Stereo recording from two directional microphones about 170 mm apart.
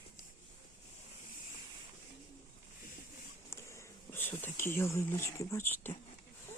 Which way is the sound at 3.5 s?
15° left (ahead or behind).